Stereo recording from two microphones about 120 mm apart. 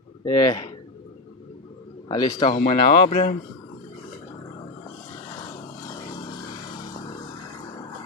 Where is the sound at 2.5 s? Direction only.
50° left (ahead or behind).